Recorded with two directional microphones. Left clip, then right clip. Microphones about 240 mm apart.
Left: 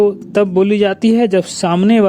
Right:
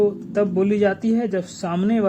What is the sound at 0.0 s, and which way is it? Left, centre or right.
Speech, left.